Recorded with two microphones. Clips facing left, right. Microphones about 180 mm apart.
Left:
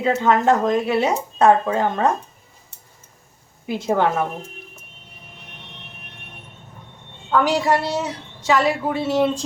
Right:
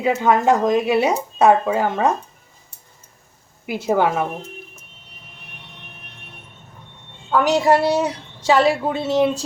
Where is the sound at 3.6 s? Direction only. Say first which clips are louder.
Right 1 dB; 10° right (ahead or behind).